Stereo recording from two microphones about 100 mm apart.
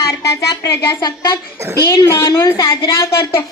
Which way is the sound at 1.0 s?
45° left (ahead or behind).